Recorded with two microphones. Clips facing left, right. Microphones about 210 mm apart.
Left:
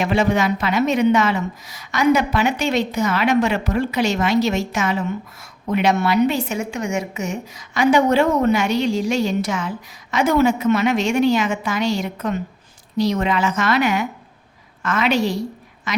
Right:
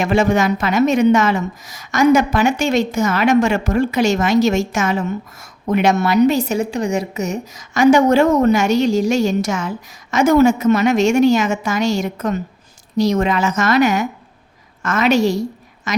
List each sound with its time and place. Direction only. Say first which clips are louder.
0.0 s a woman's voice: right 3 dB; 45° right (ahead or behind)